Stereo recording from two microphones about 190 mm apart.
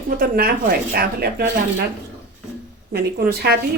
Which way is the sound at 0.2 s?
50° right (ahead or behind).